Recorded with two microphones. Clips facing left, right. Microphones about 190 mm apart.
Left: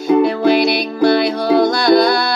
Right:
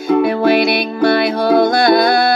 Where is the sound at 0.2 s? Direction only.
55° right (ahead or behind).